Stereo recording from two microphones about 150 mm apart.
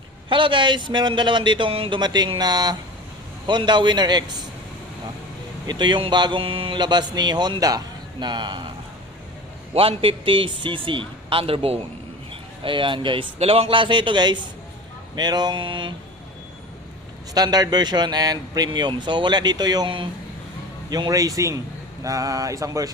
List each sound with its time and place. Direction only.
0.3 s speech: 35° right (ahead or behind)
5.6 s speech: 30° right (ahead or behind)
9.7 s speech: 40° right (ahead or behind)
17.3 s speech: 25° right (ahead or behind)